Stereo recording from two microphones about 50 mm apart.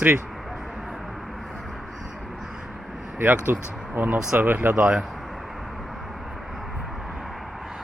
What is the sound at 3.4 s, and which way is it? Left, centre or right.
Speech, right.